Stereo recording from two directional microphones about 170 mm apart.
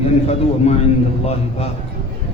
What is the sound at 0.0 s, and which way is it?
A man's voice, 40° left (ahead or behind).